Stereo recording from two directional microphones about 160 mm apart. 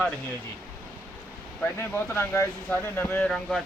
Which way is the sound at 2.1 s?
15° left (ahead or behind).